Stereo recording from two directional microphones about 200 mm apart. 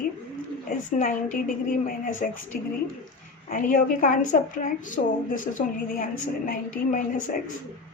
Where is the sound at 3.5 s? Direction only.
45° left (ahead or behind).